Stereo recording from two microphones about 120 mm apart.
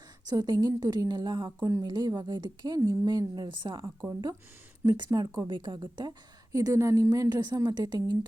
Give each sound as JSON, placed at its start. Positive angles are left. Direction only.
{"t": 0.3, "sound": "a woman's voice", "side_deg": -35}
{"t": 4.9, "sound": "a woman's voice", "side_deg": -35}